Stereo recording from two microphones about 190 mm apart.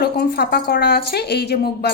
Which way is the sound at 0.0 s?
55° left (ahead or behind).